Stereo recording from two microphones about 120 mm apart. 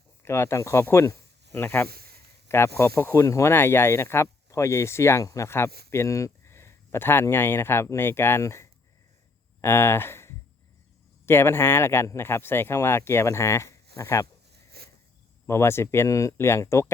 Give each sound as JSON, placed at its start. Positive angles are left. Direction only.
{"t": 0.2, "sound": "speech", "side_deg": 20}
{"t": 15.4, "sound": "speech", "side_deg": 20}